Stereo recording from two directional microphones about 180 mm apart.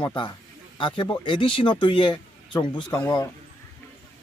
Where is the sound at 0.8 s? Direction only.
25° left (ahead or behind).